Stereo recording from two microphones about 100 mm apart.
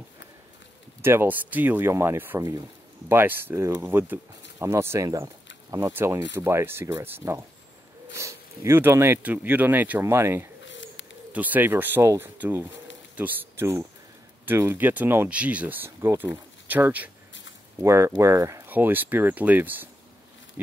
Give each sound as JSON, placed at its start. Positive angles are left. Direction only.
{"t": 1.0, "sound": "speech", "side_deg": -20}
{"t": 17.8, "sound": "speech", "side_deg": -30}
{"t": 18.7, "sound": "speech", "side_deg": -20}
{"t": 20.6, "sound": "a sound", "side_deg": -15}